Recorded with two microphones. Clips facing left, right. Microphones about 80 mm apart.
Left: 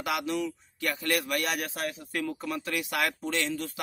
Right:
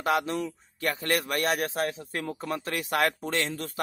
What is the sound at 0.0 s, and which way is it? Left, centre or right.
Speech, right.